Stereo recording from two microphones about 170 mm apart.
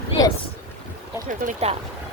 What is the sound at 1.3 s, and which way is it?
Speech, 50° right (ahead or behind).